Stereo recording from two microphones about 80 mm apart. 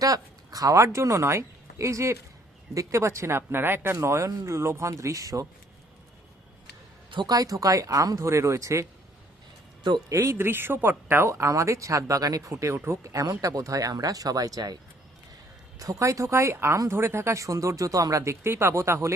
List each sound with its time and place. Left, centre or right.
0.0 s speech: right
7.1 s speech: right
7.3 s speech: right
10.1 s speech: right
15.8 s speech: right